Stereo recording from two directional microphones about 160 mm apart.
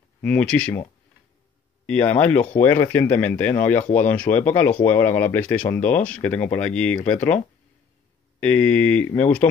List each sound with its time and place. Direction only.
0.2 s speech: 10° left (ahead or behind)
1.9 s speech: 10° left (ahead or behind)
8.4 s speech: 10° left (ahead or behind)